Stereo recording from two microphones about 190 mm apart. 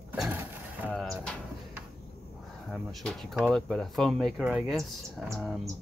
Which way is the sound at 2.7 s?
5° left (ahead or behind).